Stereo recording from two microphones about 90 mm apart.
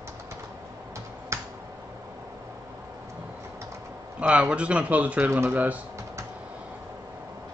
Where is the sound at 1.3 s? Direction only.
35° right (ahead or behind).